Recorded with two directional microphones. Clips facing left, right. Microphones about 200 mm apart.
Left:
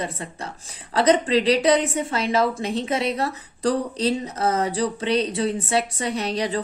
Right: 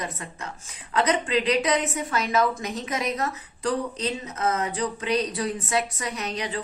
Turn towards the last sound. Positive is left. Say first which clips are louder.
# left 6 dB
turn(degrees=35)  # may be behind; listen again after turning